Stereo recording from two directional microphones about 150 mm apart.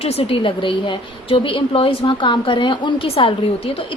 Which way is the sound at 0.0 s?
40° left (ahead or behind).